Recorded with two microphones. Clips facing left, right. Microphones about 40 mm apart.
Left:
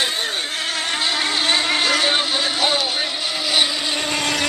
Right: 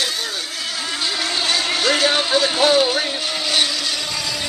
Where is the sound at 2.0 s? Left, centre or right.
Centre.